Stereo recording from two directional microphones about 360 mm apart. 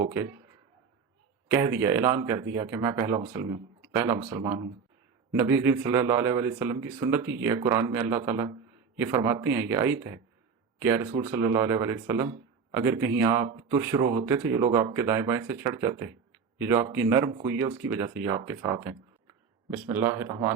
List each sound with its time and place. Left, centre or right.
0.0 s a man's voice: centre
1.5 s a man's voice: centre
13.3 s a man's voice: centre